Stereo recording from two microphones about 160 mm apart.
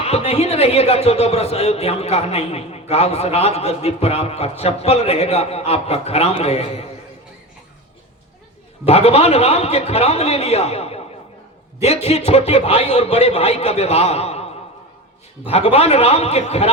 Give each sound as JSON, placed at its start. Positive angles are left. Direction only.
{"t": 0.0, "sound": "a man's voice", "side_deg": 40}
{"t": 8.9, "sound": "a man's voice", "side_deg": 40}
{"t": 12.0, "sound": "a man's voice", "side_deg": 40}